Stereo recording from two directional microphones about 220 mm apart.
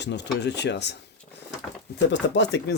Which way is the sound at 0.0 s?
50° left (ahead or behind).